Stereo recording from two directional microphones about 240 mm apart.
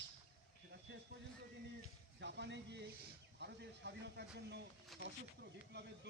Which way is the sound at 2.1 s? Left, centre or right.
Right.